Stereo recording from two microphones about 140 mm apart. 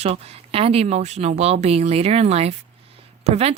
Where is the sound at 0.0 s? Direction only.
50° right (ahead or behind).